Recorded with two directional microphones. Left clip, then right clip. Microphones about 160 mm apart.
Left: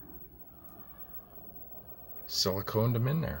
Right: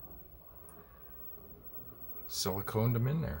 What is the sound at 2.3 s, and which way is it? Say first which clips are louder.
Speech: left 5 dB; 10° left (ahead or behind).